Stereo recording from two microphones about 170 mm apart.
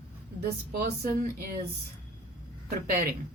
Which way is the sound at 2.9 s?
60° right (ahead or behind).